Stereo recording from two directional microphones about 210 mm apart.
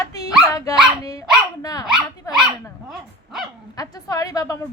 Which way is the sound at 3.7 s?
20° left (ahead or behind).